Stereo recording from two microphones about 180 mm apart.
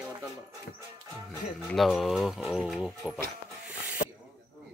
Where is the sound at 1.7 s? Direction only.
Centre (ahead or behind).